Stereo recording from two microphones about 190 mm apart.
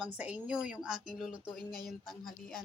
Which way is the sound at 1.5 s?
50° left (ahead or behind).